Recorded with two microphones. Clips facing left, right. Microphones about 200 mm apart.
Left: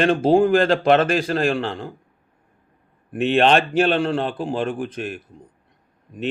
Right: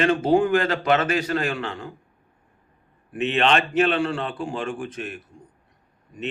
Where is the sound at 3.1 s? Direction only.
35° left (ahead or behind).